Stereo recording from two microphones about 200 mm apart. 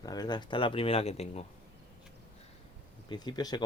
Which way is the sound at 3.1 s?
20° left (ahead or behind).